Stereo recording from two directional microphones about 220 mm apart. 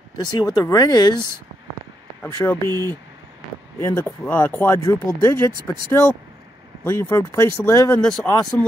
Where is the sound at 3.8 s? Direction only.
10° left (ahead or behind).